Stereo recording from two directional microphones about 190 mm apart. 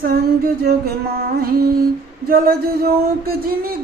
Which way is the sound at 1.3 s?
55° right (ahead or behind).